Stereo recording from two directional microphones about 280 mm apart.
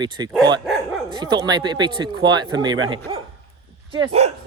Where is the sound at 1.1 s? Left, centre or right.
Centre.